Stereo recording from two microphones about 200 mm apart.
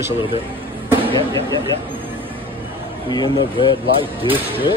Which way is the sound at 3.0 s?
20° left (ahead or behind).